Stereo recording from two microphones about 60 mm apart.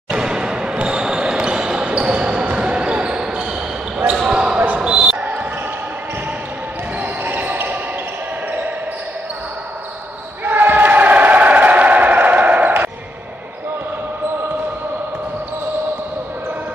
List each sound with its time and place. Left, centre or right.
0.1 s basketball bounce: centre
5.2 s basketball bounce: right
7.0 s basketball bounce: right
10.4 s crowd: right